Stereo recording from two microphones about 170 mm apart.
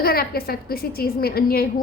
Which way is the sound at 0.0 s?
65° left (ahead or behind).